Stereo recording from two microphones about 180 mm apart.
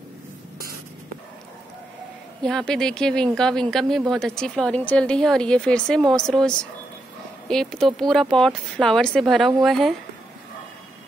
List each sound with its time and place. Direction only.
2.4 s speech: 5° left (ahead or behind)